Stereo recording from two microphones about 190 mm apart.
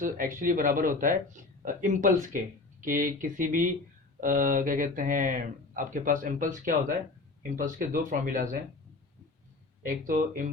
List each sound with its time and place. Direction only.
0.0 s speech: 45° right (ahead or behind)
9.8 s speech: 45° right (ahead or behind)